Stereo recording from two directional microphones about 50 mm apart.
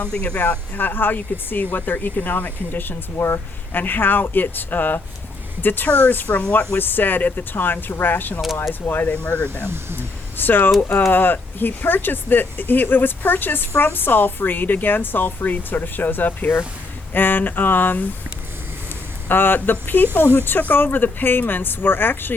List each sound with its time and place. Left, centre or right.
0.3 s speech: left
9.6 s speech: right
10.3 s speech: left
19.3 s speech: left